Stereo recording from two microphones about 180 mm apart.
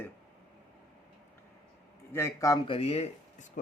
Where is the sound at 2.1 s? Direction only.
15° left (ahead or behind); by 3.5 s 35° left (ahead or behind).